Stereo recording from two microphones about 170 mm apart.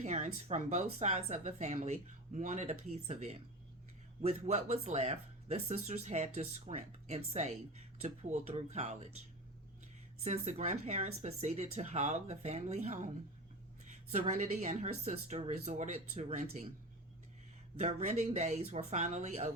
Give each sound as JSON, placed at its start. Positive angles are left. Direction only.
{"t": 0.0, "sound": "speech", "side_deg": -40}
{"t": 10.2, "sound": "speech", "side_deg": -40}
{"t": 14.1, "sound": "speech", "side_deg": -45}
{"t": 17.7, "sound": "speech", "side_deg": -40}